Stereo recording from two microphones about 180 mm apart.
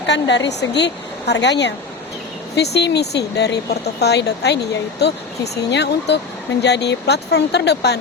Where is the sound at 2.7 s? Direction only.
70° left (ahead or behind).